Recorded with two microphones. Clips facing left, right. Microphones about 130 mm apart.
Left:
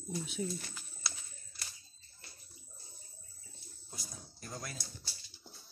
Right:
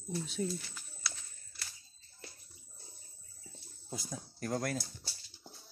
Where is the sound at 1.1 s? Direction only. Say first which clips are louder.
Even; 25° left (ahead or behind).